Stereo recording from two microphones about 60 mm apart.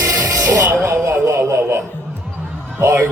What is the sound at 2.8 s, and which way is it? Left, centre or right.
Music, right.